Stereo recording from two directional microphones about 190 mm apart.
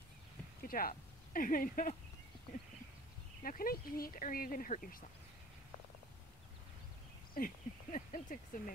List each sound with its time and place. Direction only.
0.7 s speech: 50° left (ahead or behind)
3.4 s speech: 50° left (ahead or behind)
7.3 s speech: 45° left (ahead or behind)